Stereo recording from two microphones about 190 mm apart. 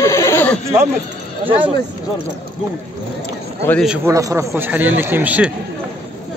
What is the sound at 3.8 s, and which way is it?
Speech, 5° right (ahead or behind).